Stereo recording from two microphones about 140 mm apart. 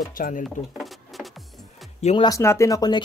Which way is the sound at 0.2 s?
75° left (ahead or behind).